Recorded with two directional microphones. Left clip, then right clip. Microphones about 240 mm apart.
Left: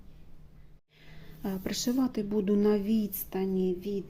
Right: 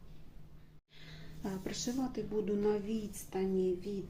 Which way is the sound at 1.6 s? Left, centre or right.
Left.